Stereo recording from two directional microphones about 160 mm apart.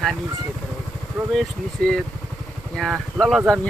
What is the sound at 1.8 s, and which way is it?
Speech, 5° left (ahead or behind).